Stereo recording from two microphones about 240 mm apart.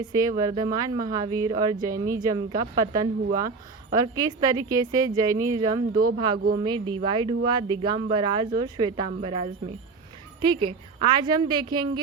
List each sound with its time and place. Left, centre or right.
0.1 s a woman's voice: centre
5.9 s speech: right
6.1 s speech: centre
10.7 s speech: centre